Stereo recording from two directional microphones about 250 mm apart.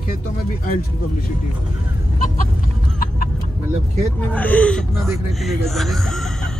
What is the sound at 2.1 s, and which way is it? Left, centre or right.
Fowl, left.